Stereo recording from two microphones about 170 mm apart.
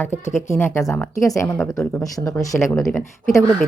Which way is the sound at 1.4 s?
5° left (ahead or behind).